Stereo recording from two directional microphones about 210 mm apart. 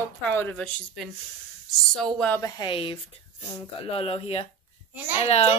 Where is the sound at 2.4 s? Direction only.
20° left (ahead or behind).